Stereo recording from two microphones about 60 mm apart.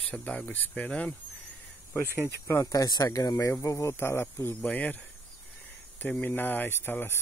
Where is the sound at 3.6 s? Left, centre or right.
Left.